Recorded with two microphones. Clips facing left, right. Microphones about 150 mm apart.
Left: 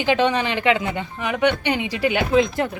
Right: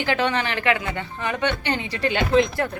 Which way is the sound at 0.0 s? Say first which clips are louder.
Left 4 dB; 15° left (ahead or behind).